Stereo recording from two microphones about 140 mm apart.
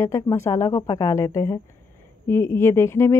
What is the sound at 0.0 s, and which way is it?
Speech, 20° left (ahead or behind).